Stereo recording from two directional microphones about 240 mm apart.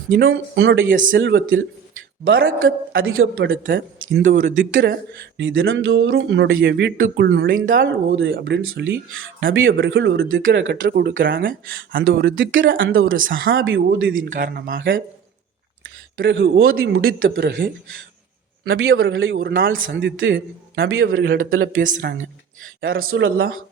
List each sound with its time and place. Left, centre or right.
0.2 s speech: right
0.6 s speech: right
4.4 s speech: right
4.9 s speech: right
7.8 s speech: right
12.0 s speech: right
14.2 s speech: right
16.1 s speech: right
18.7 s speech: right
21.5 s speech: right
21.8 s speech: right
22.8 s speech: right